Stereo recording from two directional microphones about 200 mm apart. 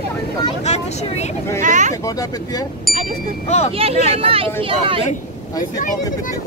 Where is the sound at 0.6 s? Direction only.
35° left (ahead or behind).